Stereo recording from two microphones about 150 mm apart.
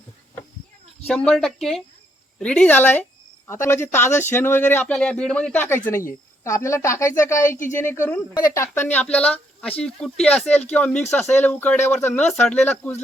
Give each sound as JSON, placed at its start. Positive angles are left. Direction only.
{"t": 1.0, "sound": "a woman's voice", "side_deg": 5}